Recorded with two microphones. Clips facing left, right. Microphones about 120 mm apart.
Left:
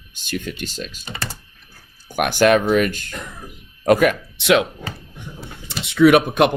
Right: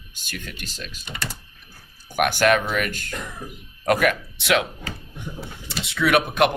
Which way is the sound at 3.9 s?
25° left (ahead or behind).